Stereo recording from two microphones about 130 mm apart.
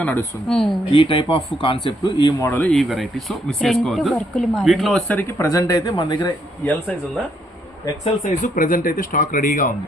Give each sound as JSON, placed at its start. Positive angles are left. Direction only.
{"t": 0.0, "sound": "speech", "side_deg": 10}
{"t": 0.9, "sound": "speech", "side_deg": 45}
{"t": 2.4, "sound": "speech", "side_deg": 15}
{"t": 4.5, "sound": "speech", "side_deg": 0}
{"t": 5.1, "sound": "speech", "side_deg": 25}
{"t": 8.2, "sound": "speech", "side_deg": 85}